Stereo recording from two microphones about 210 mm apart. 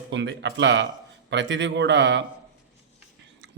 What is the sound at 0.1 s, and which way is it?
Speech, 60° right (ahead or behind).